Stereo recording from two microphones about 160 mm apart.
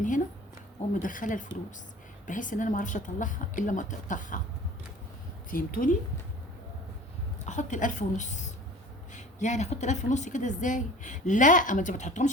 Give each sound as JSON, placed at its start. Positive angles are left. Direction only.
{"t": 0.9, "sound": "a woman's voice", "side_deg": 55}
{"t": 5.5, "sound": "a woman's voice", "side_deg": 60}
{"t": 7.4, "sound": "a woman's voice", "side_deg": 50}